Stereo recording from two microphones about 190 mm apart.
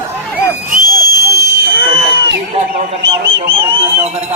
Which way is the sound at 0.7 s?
50° right (ahead or behind).